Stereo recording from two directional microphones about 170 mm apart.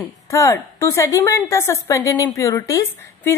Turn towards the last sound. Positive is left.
turn(degrees=15)  # may be behind; listen again after turning